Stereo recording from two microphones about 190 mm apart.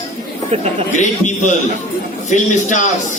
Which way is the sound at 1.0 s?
40° left (ahead or behind).